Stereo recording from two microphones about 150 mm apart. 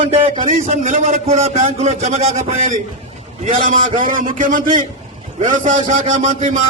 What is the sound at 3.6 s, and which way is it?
A man's voice, 65° right (ahead or behind).